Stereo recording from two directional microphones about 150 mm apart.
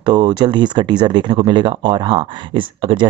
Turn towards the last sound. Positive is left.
turn(degrees=-35)  # may be behind; listen again after turning